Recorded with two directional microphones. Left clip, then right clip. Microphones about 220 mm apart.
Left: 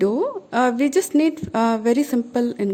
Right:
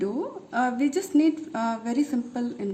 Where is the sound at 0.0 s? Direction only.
45° left (ahead or behind).